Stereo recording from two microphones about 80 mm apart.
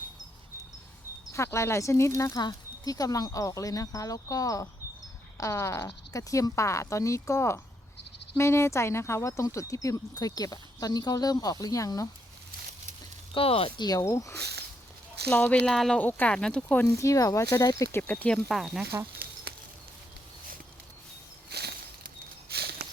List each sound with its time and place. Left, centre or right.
1.3 s speech: left
2.4 s speech: left
13.3 s speech: left
14.0 s speech: left
15.3 s speech: centre
16.0 s speech: left
16.3 s speech: centre
16.8 s speech: left
17.9 s speech: left
18.4 s speech: centre